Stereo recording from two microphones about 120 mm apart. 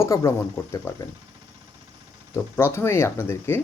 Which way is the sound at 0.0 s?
25° left (ahead or behind).